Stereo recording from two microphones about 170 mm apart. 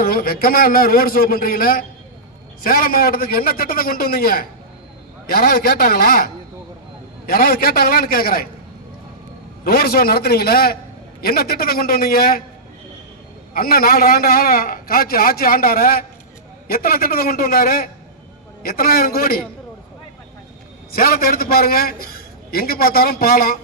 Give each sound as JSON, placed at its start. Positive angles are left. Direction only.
{"t": 0.0, "sound": "a man's voice", "side_deg": 60}
{"t": 9.6, "sound": "a man's voice", "side_deg": 65}
{"t": 13.5, "sound": "a man's voice", "side_deg": 60}
{"t": 20.9, "sound": "a man's voice", "side_deg": 60}